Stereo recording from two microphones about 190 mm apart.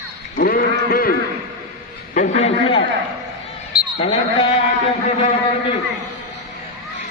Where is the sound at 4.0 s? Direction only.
30° left (ahead or behind).